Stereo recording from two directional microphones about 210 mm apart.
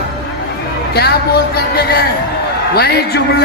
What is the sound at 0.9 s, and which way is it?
Speech, 50° left (ahead or behind).